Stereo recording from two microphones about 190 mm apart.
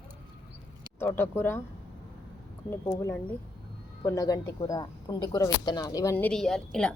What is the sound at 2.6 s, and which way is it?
Speech, 10° left (ahead or behind).